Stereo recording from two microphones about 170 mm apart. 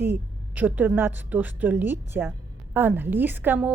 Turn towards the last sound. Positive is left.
turn(degrees=-10)  # may be behind; listen again after turning